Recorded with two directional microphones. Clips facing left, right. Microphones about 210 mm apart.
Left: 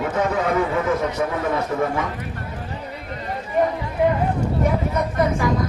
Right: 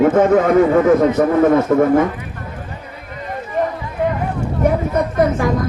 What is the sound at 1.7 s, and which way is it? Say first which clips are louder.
Speech: right 9 dB; 65° right (ahead or behind).